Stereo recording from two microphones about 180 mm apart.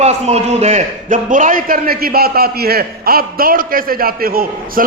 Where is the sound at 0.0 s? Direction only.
35° right (ahead or behind).